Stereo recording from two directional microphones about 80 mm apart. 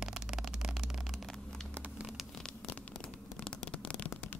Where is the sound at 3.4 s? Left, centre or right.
Centre.